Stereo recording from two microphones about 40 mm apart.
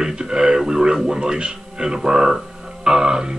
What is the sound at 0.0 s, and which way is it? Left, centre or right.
Radio, centre.